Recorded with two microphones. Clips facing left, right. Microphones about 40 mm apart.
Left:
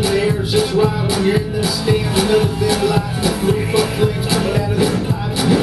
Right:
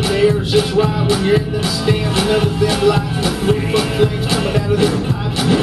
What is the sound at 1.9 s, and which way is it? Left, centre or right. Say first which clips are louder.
Music: even; centre.